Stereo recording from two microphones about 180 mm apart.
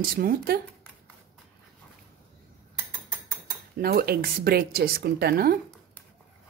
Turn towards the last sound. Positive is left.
turn(degrees=-60)  # may be behind; listen again after turning